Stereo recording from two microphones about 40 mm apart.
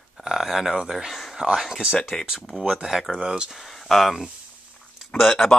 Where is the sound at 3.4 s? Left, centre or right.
Centre.